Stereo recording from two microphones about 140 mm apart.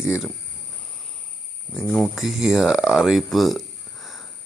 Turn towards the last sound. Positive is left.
turn(degrees=0)  # may be behind; listen again after turning